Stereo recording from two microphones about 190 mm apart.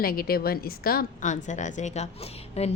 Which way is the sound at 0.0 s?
50° left (ahead or behind).